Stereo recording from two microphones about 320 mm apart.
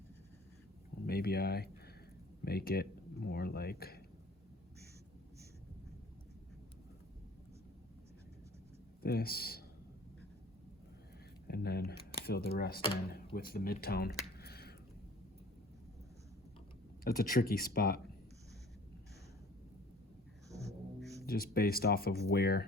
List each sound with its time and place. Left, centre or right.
1.0 s speech: left
9.0 s speech: left
11.4 s speech: left
17.0 s speech: left
20.5 s music: centre
21.2 s speech: left